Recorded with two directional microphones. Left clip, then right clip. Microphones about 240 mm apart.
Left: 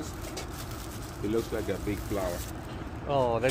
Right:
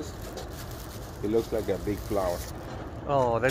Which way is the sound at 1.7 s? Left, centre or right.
Centre.